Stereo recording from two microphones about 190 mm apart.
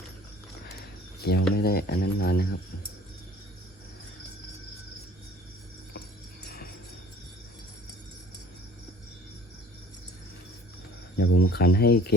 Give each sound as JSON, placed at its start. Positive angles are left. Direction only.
{"t": 0.7, "sound": "a sound", "side_deg": 55}
{"t": 1.5, "sound": "speech", "side_deg": 55}
{"t": 11.2, "sound": "speech", "side_deg": 60}